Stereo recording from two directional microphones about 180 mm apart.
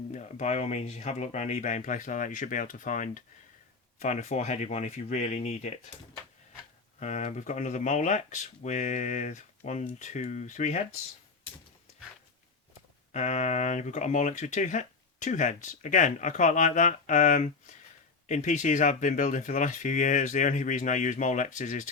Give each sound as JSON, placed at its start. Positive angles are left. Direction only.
{"t": 0.1, "sound": "speech", "side_deg": 40}
{"t": 7.0, "sound": "speech", "side_deg": 40}
{"t": 13.1, "sound": "speech", "side_deg": 40}